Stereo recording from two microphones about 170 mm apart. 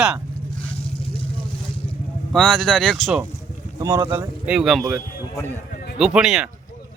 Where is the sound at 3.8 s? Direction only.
25° right (ahead or behind).